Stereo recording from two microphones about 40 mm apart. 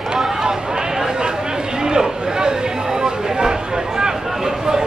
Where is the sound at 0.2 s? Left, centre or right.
Centre.